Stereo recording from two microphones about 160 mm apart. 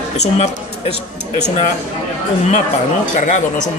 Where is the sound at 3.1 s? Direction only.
50° left (ahead or behind).